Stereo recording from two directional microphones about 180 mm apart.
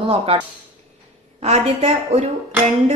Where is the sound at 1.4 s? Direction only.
35° right (ahead or behind).